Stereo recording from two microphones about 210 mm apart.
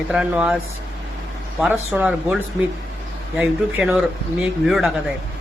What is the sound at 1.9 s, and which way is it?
Speech, 5° right (ahead or behind).